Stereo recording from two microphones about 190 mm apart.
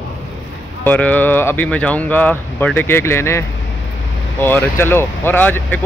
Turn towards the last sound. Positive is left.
turn(degrees=10)  # may be behind; listen again after turning